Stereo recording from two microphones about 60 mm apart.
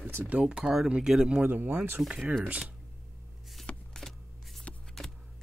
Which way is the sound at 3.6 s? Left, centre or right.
Centre.